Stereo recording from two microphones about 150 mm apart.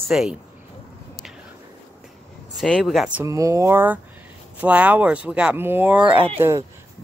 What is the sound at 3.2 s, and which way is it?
Speech, 20° right (ahead or behind).